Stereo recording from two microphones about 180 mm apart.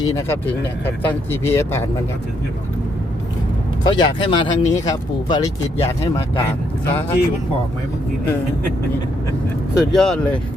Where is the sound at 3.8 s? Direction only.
25° left (ahead or behind).